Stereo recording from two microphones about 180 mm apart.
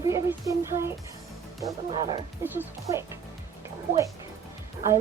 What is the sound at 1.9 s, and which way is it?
Speech, 25° right (ahead or behind).